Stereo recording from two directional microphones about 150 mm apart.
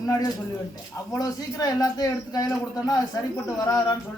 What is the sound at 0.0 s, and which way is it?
A man's voice, 20° left (ahead or behind).